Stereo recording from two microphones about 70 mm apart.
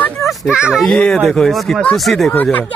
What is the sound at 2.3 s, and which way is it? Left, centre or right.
Speech, left.